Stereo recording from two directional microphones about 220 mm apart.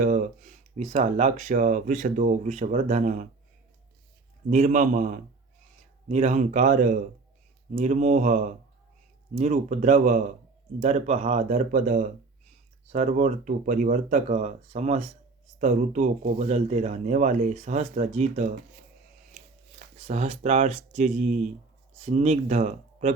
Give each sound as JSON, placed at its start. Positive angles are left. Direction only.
{"t": 0.0, "sound": "speech", "side_deg": -35}
{"t": 4.4, "sound": "speech", "side_deg": -30}
{"t": 20.0, "sound": "speech", "side_deg": -30}